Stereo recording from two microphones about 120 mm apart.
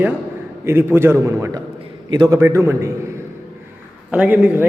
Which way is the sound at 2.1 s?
35° right (ahead or behind).